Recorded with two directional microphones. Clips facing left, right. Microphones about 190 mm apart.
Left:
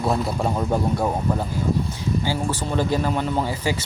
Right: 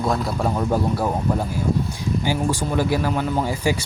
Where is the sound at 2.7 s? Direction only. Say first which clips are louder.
Left 1 dB; 10° right (ahead or behind).